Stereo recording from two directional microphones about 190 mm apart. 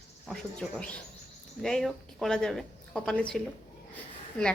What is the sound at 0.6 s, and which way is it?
Speech, centre (ahead or behind).